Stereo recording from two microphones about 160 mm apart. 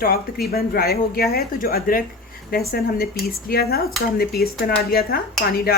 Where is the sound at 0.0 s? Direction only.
70° left (ahead or behind).